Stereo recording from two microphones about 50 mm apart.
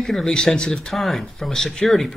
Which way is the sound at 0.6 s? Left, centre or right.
Centre.